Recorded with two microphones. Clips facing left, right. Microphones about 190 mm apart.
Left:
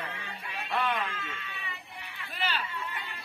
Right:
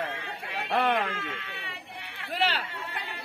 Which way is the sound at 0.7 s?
70° right (ahead or behind).